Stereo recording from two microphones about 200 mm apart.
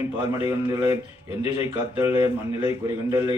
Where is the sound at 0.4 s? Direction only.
15° right (ahead or behind).